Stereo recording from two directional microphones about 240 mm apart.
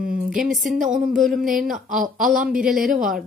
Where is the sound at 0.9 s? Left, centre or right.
Right.